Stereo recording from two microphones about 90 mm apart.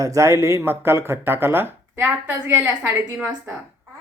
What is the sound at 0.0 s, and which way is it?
Speech, 35° right (ahead or behind).